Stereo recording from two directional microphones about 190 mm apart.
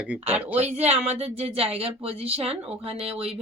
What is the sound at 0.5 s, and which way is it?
Speech, 35° right (ahead or behind).